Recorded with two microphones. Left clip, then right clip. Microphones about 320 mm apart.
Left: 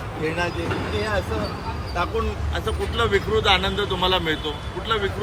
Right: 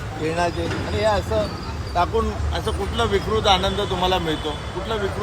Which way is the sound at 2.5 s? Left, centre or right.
Centre.